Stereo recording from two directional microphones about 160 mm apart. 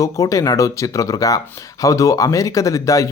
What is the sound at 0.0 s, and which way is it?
Speech, 20° left (ahead or behind).